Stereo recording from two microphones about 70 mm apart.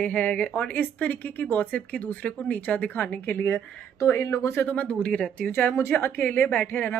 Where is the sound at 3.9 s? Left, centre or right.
Left.